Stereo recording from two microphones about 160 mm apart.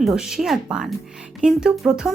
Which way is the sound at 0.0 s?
Centre (ahead or behind).